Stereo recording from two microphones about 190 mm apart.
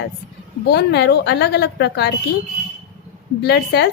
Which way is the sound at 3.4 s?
60° left (ahead or behind).